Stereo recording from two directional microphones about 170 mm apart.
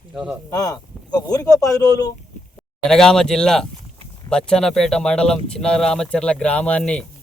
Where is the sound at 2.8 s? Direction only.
5° left (ahead or behind).